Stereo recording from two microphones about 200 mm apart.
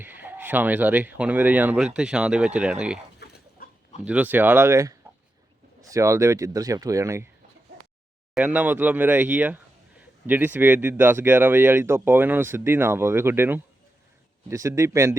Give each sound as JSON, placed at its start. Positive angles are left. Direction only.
{"t": 0.0, "sound": "speech", "side_deg": -10}
{"t": 3.2, "sound": "pig", "side_deg": 55}
{"t": 4.0, "sound": "speech", "side_deg": -5}
{"t": 8.4, "sound": "speech", "side_deg": -10}